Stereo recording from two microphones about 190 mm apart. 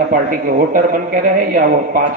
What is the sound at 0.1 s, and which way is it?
A man's voice, 45° right (ahead or behind).